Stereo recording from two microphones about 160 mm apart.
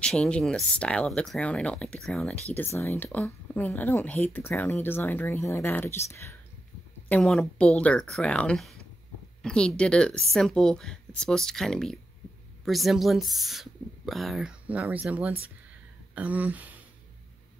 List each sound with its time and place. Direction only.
0.0 s speech: 5° left (ahead or behind)
7.1 s speech: 5° left (ahead or behind)